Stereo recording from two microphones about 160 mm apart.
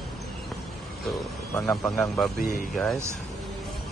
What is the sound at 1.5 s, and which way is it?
Speech, 20° left (ahead or behind).